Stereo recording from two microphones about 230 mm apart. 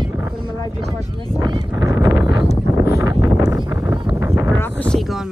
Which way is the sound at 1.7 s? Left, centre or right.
Centre.